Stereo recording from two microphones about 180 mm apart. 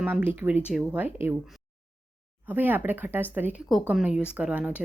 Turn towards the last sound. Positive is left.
turn(degrees=-5)  # may be behind; listen again after turning